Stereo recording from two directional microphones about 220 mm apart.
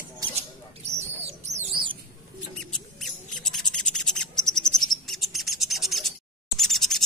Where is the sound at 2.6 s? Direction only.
Centre (ahead or behind).